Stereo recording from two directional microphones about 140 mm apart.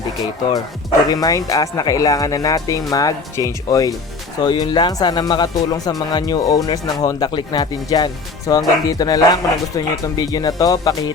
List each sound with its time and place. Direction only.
1.1 s speech: 25° left (ahead or behind)